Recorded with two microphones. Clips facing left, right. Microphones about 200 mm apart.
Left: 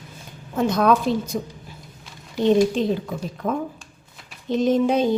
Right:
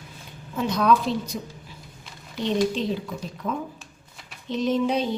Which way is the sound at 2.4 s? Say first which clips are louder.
Left 6 dB; 50° left (ahead or behind).